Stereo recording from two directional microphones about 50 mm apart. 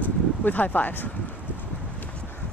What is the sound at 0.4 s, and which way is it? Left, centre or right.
Speech, left.